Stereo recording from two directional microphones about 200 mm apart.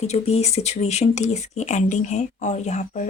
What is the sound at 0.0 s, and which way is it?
Speech, 30° left (ahead or behind).